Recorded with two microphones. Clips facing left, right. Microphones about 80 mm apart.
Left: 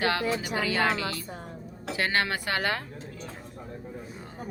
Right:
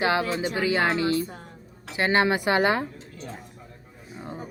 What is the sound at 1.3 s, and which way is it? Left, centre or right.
Speech, centre.